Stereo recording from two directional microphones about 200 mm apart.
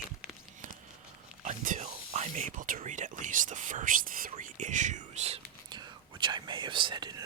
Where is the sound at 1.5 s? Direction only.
40° right (ahead or behind).